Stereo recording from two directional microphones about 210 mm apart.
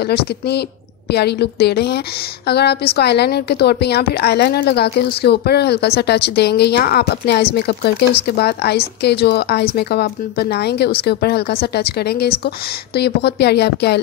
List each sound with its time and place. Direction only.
0.5 s a woman's voice: 50° left (ahead or behind)